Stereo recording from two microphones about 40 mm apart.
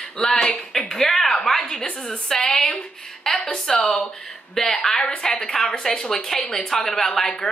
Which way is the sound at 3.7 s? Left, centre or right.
Centre.